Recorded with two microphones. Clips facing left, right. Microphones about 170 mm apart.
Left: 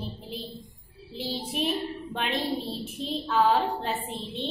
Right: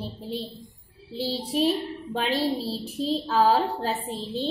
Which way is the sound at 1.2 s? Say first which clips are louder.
Right 5 dB; 30° right (ahead or behind).